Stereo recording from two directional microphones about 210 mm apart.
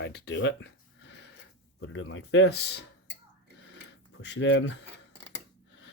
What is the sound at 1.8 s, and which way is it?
Speech, 60° left (ahead or behind).